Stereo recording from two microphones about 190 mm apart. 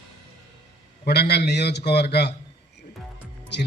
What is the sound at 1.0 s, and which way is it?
A man's voice, 60° left (ahead or behind).